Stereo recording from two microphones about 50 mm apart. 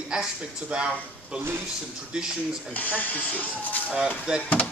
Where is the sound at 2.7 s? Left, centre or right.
Left.